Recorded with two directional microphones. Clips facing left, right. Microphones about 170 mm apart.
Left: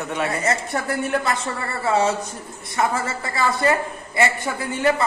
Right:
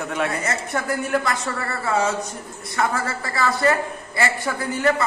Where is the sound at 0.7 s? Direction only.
30° left (ahead or behind).